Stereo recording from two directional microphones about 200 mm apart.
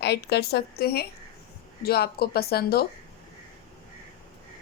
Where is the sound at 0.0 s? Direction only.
55° left (ahead or behind).